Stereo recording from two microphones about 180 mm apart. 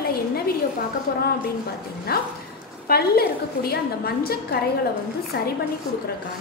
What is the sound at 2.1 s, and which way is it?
A woman's voice, 60° left (ahead or behind).